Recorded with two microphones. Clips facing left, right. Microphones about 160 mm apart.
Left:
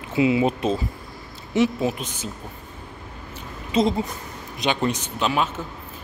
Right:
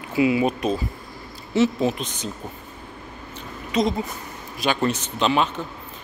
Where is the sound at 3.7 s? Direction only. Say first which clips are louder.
Left 1 dB; 30° left (ahead or behind).